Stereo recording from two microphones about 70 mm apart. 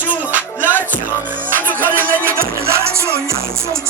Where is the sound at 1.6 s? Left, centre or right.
Left.